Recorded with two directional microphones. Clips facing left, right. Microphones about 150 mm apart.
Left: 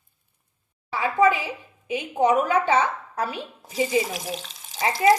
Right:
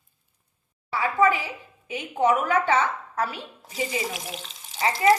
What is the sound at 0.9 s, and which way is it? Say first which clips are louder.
A woman's voice: left 2 dB; 15° left (ahead or behind).